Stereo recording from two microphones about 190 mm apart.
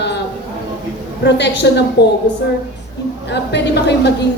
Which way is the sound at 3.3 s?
65° left (ahead or behind).